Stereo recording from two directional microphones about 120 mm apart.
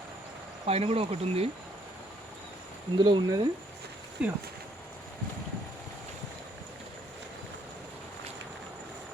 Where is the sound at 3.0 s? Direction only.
40° right (ahead or behind).